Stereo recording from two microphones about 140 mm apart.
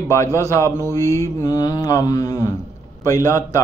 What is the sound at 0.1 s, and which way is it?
Speech, 20° left (ahead or behind).